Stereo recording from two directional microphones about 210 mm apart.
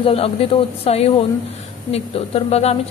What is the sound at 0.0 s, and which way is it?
A woman's voice, 25° left (ahead or behind).